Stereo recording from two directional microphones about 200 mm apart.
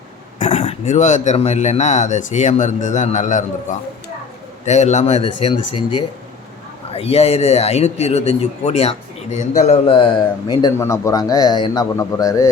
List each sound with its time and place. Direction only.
0.3 s speech: 35° left (ahead or behind)
6.9 s speech: 30° left (ahead or behind); by 12.5 s 15° left (ahead or behind)